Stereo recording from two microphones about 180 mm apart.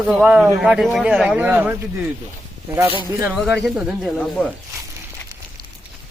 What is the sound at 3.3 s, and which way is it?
Speech, 5° right (ahead or behind).